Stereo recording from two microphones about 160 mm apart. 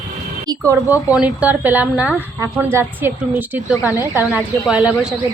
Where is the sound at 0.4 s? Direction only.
20° right (ahead or behind).